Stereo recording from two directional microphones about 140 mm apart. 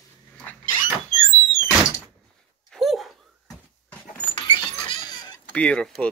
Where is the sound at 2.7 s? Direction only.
Centre (ahead or behind).